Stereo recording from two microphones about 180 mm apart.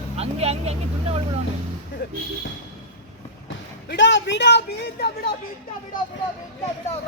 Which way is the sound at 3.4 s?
90° left.